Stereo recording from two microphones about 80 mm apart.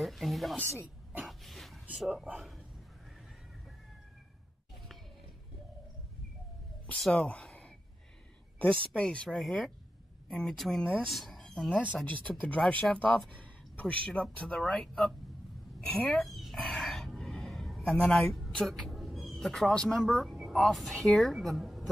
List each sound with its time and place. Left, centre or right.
0.0 s speech: centre
1.2 s dog: centre
2.0 s a man's voice: centre
7.0 s speech: centre
13.4 s a sound: left
14.0 s speech: centre
15.8 s a sound: centre
18.1 s speech: centre